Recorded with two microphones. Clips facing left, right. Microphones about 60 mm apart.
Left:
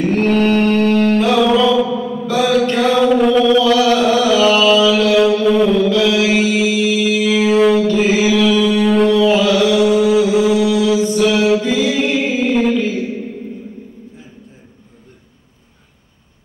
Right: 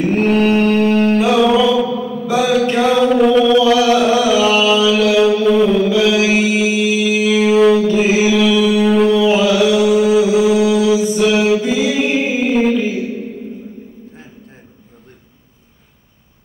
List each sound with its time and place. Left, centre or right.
0.0 s music: centre
2.2 s mantra: centre
3.0 s chant: centre
5.9 s mantra: centre
7.3 s music: centre
12.5 s a sound: centre
12.8 s a sound: centre